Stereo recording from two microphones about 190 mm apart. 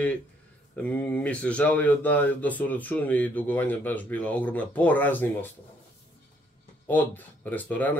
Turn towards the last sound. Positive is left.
turn(degrees=10)  # may be behind; listen again after turning